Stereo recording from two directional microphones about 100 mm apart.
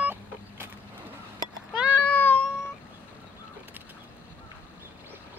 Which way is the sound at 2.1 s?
15° left (ahead or behind).